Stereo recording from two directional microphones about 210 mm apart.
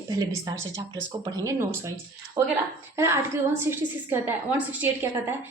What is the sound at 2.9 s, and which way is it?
A woman's voice, 15° right (ahead or behind).